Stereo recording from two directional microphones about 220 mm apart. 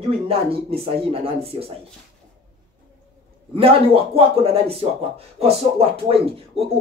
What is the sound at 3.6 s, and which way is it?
Speech, 25° right (ahead or behind).